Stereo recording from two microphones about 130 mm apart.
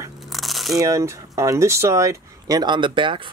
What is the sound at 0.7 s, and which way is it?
Speech, 25° right (ahead or behind).